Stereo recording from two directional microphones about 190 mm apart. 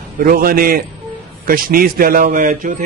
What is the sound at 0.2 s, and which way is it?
Speech, 50° right (ahead or behind).